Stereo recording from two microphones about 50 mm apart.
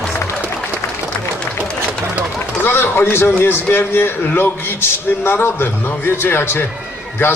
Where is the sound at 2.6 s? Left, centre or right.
Left.